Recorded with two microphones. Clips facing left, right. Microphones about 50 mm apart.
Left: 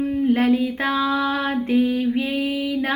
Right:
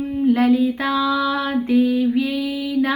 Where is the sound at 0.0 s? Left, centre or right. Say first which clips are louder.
Right 1 dB; left.